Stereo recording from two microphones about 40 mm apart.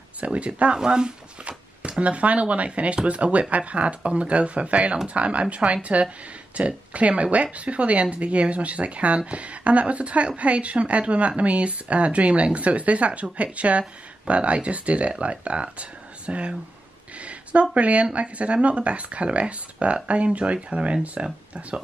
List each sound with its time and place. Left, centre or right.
0.2 s speech: right
0.7 s speech: centre
1.8 s speech: right
17.2 s a sound: right
18.1 s speech: right